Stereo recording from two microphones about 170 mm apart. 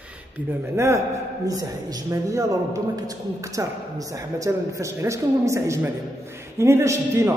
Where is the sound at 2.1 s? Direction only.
20° right (ahead or behind).